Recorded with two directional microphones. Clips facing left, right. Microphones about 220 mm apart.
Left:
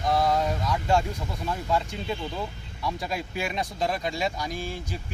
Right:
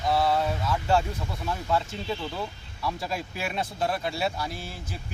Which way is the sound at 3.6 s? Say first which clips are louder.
Right 1 dB; 15° left (ahead or behind).